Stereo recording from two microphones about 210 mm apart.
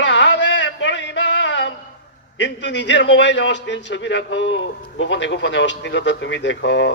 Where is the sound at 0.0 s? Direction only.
60° left (ahead or behind).